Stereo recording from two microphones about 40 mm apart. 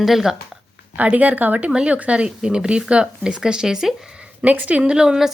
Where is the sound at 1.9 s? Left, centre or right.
Right; by 3.9 s centre.